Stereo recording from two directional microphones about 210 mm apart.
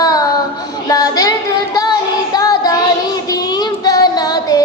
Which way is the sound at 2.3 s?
20° left (ahead or behind).